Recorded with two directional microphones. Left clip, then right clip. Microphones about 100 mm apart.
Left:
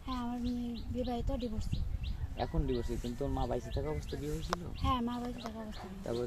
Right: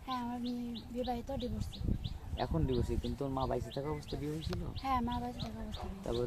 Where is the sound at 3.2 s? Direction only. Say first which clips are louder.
Even; 40° right (ahead or behind).